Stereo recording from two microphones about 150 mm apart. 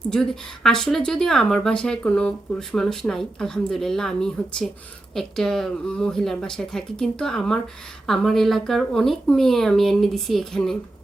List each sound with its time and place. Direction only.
0.1 s speech: 5° left (ahead or behind)